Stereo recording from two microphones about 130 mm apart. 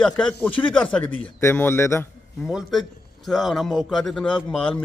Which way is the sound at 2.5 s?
Centre (ahead or behind).